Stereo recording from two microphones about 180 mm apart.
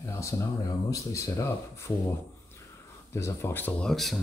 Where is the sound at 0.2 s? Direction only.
20° left (ahead or behind).